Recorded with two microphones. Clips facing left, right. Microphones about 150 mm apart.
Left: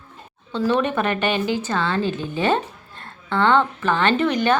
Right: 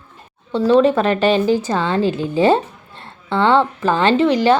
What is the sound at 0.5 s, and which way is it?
Speech, 30° right (ahead or behind).